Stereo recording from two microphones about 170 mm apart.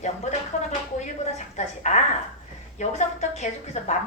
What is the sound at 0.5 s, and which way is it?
A woman's voice, 40° left (ahead or behind).